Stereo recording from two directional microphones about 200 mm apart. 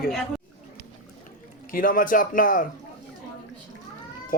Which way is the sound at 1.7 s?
45° left (ahead or behind).